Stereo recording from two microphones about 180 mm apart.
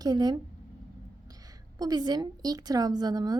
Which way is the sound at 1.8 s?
20° right (ahead or behind).